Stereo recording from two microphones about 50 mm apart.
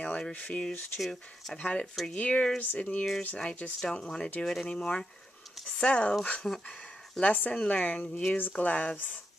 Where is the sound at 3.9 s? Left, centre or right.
Centre.